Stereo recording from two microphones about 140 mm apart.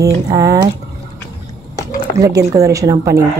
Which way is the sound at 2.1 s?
25° right (ahead or behind).